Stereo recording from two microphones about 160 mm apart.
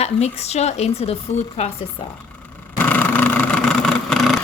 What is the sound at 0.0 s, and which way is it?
Speech, 40° left (ahead or behind).